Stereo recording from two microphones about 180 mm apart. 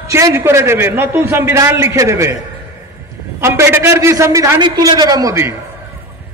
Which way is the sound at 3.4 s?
15° right (ahead or behind).